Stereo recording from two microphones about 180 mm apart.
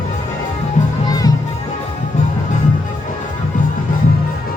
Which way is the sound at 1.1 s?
20° left (ahead or behind).